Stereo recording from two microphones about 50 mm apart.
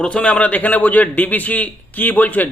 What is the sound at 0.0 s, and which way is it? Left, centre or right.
A man's voice, left.